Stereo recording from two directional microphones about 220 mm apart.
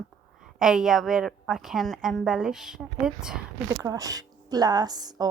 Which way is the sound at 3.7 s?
15° right (ahead or behind).